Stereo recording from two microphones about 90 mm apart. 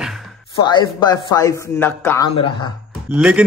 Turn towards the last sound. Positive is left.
turn(degrees=-15)  # may be behind; listen again after turning